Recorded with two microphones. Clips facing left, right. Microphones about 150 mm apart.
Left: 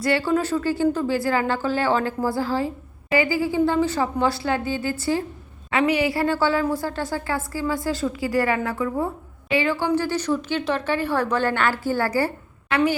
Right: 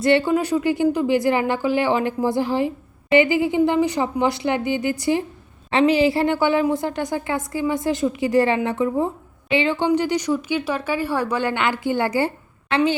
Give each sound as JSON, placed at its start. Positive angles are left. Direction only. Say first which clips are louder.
{"t": 0.0, "sound": "a woman's voice", "louder": "right 4 dB", "side_deg": -20}